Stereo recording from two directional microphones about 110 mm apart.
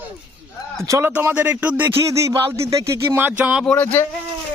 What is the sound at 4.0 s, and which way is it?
Speech, 25° left (ahead or behind).